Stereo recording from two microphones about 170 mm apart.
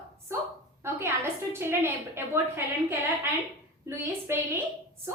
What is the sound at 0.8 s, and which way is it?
A woman's voice, 15° right (ahead or behind).